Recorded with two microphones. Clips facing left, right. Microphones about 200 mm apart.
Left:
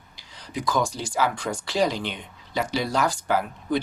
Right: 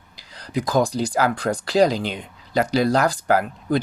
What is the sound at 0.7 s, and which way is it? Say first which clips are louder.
Speech: right 5 dB; 35° right (ahead or behind).